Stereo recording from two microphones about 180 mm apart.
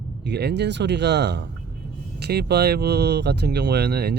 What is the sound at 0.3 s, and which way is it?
Speech, 70° right (ahead or behind).